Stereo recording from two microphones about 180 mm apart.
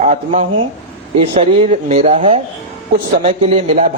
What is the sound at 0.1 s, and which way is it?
A man's voice, 40° right (ahead or behind).